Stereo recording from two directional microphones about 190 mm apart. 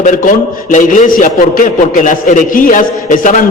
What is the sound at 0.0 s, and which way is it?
A man's voice, 40° left (ahead or behind).